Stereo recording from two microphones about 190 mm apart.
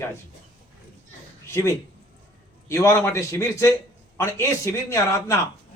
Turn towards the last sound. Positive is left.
turn(degrees=15)  # may be behind; listen again after turning